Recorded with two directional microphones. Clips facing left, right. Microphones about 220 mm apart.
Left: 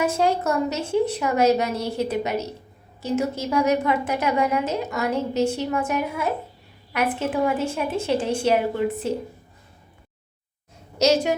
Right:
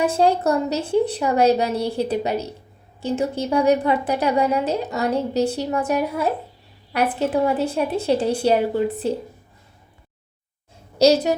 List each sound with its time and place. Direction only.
0.0 s a woman's voice: 30° right (ahead or behind)
10.9 s a woman's voice: 35° right (ahead or behind)